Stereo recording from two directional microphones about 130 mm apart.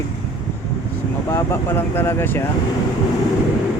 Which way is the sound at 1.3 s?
20° left (ahead or behind).